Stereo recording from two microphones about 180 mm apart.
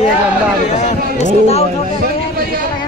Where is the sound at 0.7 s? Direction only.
40° left (ahead or behind).